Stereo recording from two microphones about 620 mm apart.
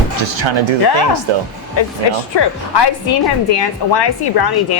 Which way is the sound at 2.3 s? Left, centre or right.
Left.